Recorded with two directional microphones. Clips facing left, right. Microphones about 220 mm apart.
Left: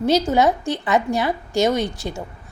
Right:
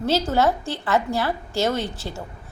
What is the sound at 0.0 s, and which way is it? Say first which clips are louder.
A woman's voice: left 3 dB; 15° left (ahead or behind).